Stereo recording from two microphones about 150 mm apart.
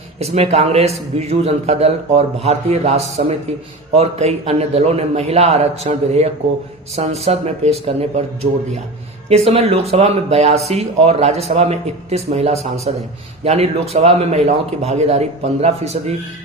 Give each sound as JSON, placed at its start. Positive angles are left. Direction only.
{"t": 0.2, "sound": "a man's voice", "side_deg": -45}
{"t": 9.3, "sound": "a man's voice", "side_deg": -45}